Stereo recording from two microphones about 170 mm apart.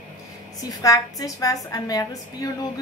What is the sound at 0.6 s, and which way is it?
A woman's voice, 20° left (ahead or behind).